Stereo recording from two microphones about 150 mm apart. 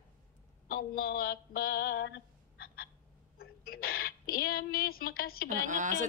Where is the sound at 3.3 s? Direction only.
85° left.